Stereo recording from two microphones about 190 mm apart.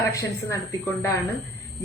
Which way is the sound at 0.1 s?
15° left (ahead or behind).